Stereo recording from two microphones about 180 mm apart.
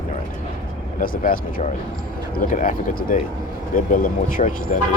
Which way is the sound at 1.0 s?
50° left (ahead or behind).